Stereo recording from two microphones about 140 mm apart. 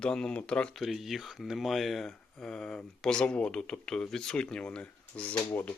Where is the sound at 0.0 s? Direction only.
5° left (ahead or behind).